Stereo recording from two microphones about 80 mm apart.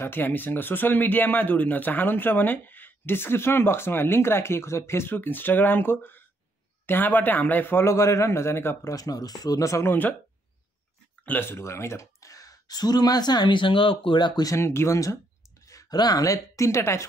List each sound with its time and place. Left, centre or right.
0.0 s speech: left
8.9 s speech: left
11.2 s speech: left
14.4 s speech: left